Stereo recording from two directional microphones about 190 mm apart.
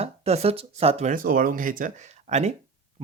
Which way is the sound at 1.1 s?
50° right (ahead or behind).